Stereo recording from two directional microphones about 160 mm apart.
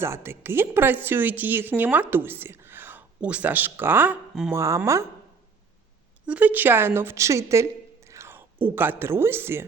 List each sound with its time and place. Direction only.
0.0 s speech: 15° right (ahead or behind)
4.5 s speech: 15° right (ahead or behind)
6.2 s a woman's voice: 10° right (ahead or behind)